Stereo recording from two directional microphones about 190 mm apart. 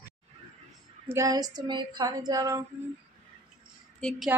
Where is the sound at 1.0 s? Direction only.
15° right (ahead or behind).